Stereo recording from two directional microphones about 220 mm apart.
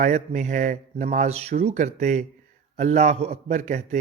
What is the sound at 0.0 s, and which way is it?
Speech, 30° right (ahead or behind).